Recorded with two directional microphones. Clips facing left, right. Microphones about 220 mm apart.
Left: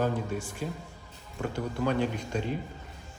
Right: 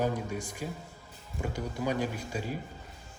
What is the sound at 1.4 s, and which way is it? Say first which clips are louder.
Speech: left 3 dB; 10° right (ahead or behind).